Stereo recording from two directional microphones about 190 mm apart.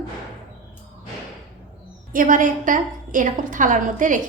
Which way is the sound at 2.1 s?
45° right (ahead or behind).